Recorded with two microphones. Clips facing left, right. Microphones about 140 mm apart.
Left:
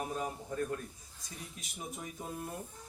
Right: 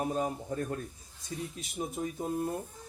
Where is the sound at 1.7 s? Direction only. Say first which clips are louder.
Right 9 dB; 40° right (ahead or behind).